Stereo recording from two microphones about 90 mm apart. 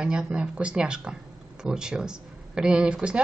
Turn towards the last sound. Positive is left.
turn(degrees=-10)  # may be behind; listen again after turning